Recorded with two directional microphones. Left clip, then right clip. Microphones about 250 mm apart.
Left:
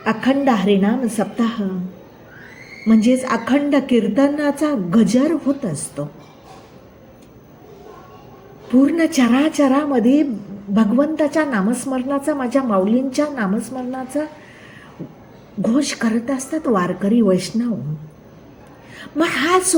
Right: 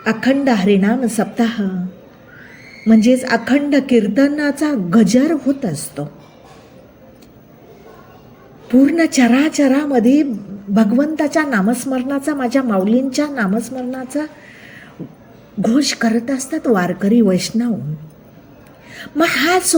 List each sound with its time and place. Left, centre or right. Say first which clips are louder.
0.0 s a woman's voice: right 1 dB; right
2.9 s a woman's voice: right 3 dB; right
8.7 s a woman's voice: right 3 dB; right
15.6 s a woman's voice: right 3 dB; right
18.9 s a woman's voice: right 4 dB; right